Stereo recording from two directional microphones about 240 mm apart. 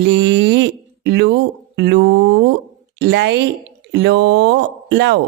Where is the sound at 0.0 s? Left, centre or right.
Right.